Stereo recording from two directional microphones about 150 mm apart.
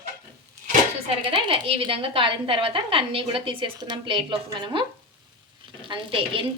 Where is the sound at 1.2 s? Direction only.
35° right (ahead or behind).